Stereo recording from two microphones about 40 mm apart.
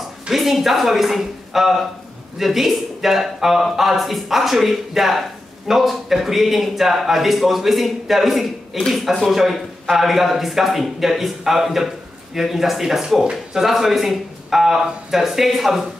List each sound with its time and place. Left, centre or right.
0.3 s a man's voice: centre
13.2 s speech: centre
13.7 s a man's voice: centre